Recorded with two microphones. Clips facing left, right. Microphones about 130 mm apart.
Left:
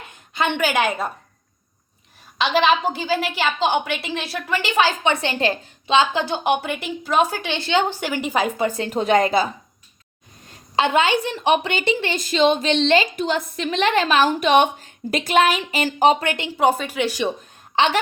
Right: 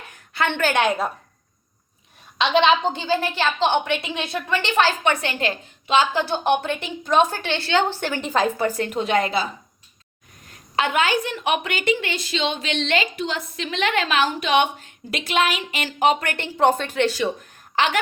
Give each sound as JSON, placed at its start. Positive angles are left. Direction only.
{"t": 0.1, "sound": "a woman's voice", "side_deg": 20}
{"t": 2.4, "sound": "a woman's voice", "side_deg": 5}
{"t": 5.2, "sound": "a woman's voice", "side_deg": 30}
{"t": 8.9, "sound": "a sound", "side_deg": 40}
{"t": 10.5, "sound": "a woman's voice", "side_deg": 25}
{"t": 12.1, "sound": "a sound", "side_deg": 45}
{"t": 13.1, "sound": "a woman's voice", "side_deg": 45}
{"t": 16.2, "sound": "a woman's voice", "side_deg": 20}
{"t": 16.6, "sound": "a woman's voice", "side_deg": 10}
{"t": 17.7, "sound": "speech", "side_deg": 25}